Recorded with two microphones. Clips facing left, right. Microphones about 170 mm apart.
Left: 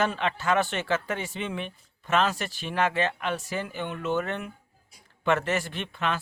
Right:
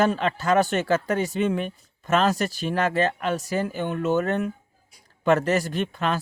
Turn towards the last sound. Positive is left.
turn(degrees=-40)  # may be behind; listen again after turning